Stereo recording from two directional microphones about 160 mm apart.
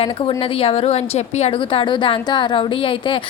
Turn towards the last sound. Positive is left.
turn(degrees=30)  # may be behind; listen again after turning